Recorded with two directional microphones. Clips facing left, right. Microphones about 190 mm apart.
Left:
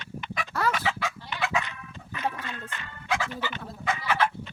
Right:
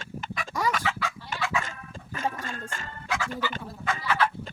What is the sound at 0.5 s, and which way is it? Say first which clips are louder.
Chicken: even; 10° right (ahead or behind).